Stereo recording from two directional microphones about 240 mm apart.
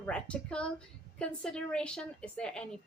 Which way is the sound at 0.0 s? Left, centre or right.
Centre.